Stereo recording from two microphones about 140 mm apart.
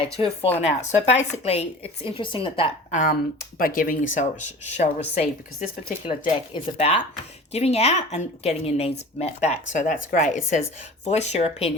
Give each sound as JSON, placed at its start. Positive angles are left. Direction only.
{"t": 0.0, "sound": "a woman's voice", "side_deg": 40}
{"t": 0.8, "sound": "a woman's voice", "side_deg": 55}
{"t": 2.9, "sound": "speech", "side_deg": 65}
{"t": 3.6, "sound": "speech", "side_deg": 85}
{"t": 4.8, "sound": "speech", "side_deg": 50}
{"t": 6.1, "sound": "speech", "side_deg": 40}